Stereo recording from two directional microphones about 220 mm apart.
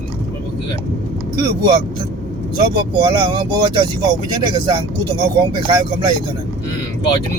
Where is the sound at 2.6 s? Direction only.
20° right (ahead or behind).